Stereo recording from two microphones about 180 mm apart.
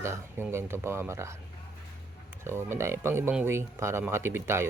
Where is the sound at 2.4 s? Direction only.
15° right (ahead or behind).